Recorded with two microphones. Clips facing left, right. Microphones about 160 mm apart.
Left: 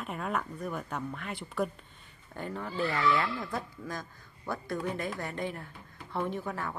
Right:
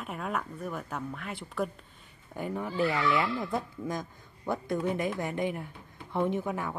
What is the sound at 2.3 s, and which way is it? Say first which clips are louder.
A woman's voice: right 4 dB; 10° right (ahead or behind).